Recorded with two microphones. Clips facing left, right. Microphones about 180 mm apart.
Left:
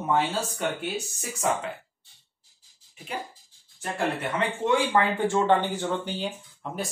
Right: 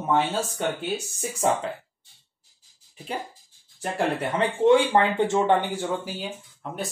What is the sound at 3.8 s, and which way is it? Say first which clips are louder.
Speech: right 3 dB; 30° right (ahead or behind).